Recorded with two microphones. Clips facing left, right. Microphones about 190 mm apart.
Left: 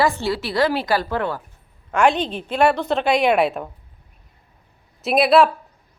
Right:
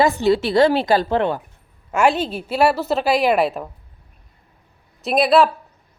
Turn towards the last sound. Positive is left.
turn(degrees=0)  # may be behind; listen again after turning